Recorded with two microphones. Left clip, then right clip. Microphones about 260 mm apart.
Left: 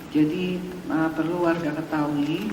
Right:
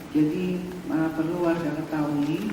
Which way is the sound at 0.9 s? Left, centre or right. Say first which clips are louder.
Left 2 dB; centre.